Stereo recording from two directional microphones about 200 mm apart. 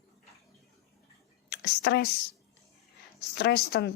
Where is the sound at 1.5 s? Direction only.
55° left (ahead or behind).